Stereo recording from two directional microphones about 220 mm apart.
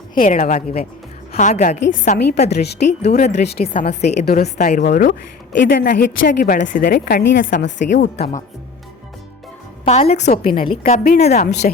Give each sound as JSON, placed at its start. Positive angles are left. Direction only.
{"t": 0.1, "sound": "a woman's voice", "side_deg": 35}
{"t": 3.1, "sound": "a woman's voice", "side_deg": 40}
{"t": 8.0, "sound": "speech", "side_deg": 50}
{"t": 9.8, "sound": "a woman's voice", "side_deg": 25}
{"t": 10.5, "sound": "a woman's voice", "side_deg": 25}